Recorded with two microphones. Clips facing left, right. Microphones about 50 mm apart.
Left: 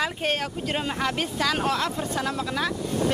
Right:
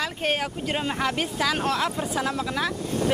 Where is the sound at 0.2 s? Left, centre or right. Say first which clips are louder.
Right 1 dB; centre.